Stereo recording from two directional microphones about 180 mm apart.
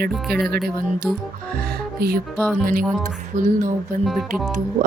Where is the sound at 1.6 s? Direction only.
60° right (ahead or behind).